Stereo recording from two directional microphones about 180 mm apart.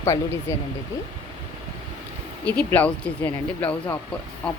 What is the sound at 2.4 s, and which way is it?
Speech, 10° left (ahead or behind).